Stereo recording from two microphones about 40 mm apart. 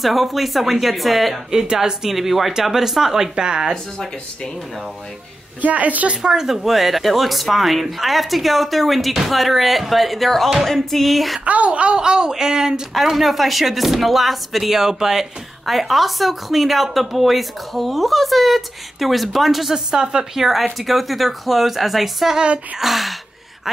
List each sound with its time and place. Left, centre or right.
0.0 s speech: centre
1.5 s speech: centre
5.6 s a woman's voice: right
6.2 s speech: centre
11.4 s speech: right; by 12.8 s centre
12.9 s speech: centre
20.3 s speech: centre